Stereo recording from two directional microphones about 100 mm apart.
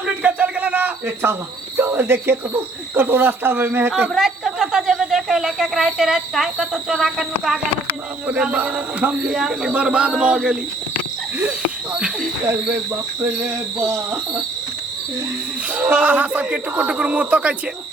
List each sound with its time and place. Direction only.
0.2 s a sound: 15° right (ahead or behind)
2.9 s speech: 20° right (ahead or behind)
4.1 s speech: 5° right (ahead or behind)
11.9 s a sound: 10° right (ahead or behind)
13.2 s speech: 20° right (ahead or behind)
15.7 s speech: 15° right (ahead or behind)